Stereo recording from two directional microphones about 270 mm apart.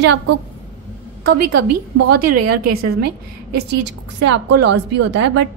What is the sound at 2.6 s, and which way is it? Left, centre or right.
Speech, right.